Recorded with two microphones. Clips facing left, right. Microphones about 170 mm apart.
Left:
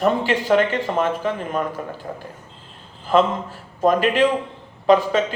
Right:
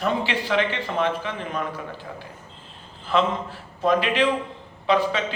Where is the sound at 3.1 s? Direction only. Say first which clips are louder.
Left 5 dB; 45° left (ahead or behind).